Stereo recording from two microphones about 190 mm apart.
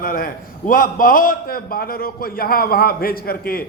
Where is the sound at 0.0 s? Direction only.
50° left (ahead or behind).